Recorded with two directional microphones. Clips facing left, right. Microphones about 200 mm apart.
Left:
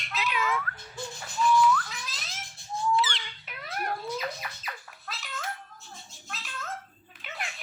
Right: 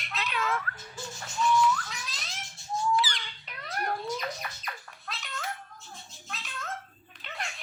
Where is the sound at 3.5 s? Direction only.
5° left (ahead or behind).